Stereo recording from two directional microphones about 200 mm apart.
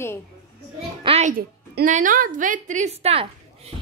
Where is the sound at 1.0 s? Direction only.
30° right (ahead or behind).